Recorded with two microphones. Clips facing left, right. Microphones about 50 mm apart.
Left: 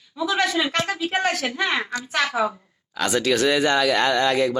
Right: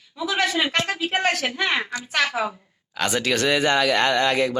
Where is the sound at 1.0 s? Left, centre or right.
Right.